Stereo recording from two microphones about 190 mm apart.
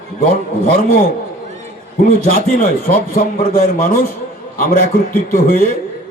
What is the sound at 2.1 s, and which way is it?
Speech, 50° left (ahead or behind).